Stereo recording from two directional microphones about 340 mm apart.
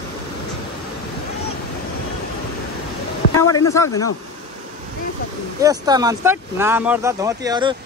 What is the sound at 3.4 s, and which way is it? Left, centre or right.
Speech, centre.